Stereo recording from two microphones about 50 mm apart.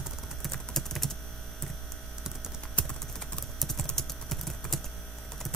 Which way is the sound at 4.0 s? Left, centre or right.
Centre.